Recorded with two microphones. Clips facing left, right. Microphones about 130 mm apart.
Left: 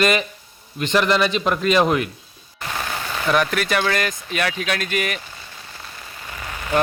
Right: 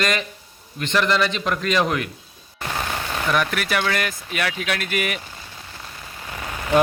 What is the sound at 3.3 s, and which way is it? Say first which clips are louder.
Speech: left 3 dB; 5° right (ahead or behind).